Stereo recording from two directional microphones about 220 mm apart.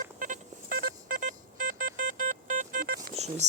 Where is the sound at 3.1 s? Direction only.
30° right (ahead or behind).